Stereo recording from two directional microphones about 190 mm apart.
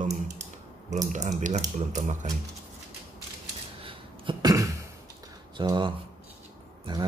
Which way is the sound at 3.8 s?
25° right (ahead or behind).